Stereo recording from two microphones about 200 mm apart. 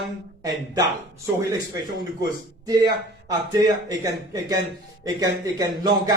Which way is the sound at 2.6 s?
15° right (ahead or behind).